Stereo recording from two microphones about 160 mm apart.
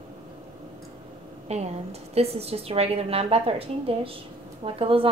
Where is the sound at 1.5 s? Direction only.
45° right (ahead or behind).